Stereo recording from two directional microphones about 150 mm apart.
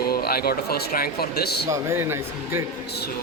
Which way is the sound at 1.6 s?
20° right (ahead or behind).